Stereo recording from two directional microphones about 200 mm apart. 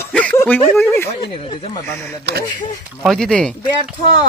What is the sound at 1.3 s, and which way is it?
Speech, 25° left (ahead or behind).